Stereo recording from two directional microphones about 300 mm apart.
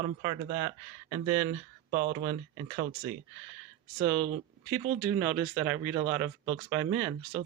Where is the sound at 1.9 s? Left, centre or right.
Right.